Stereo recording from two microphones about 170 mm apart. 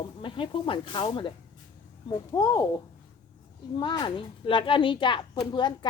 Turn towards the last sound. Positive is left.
turn(degrees=25)  # may be behind; listen again after turning